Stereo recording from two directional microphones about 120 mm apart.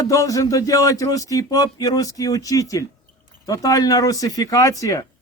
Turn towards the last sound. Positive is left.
turn(degrees=30)  # may be behind; listen again after turning